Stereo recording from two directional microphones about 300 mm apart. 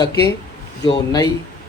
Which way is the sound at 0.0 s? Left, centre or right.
Centre.